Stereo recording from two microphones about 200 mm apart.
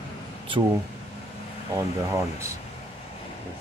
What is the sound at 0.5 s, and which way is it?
Speech, 25° right (ahead or behind).